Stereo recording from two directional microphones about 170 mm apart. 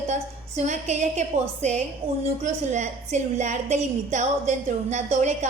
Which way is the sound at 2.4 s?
45° right (ahead or behind).